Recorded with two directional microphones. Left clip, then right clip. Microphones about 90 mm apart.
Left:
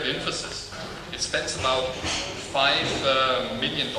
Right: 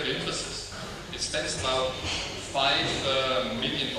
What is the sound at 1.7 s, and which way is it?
A man's voice, 30° left (ahead or behind).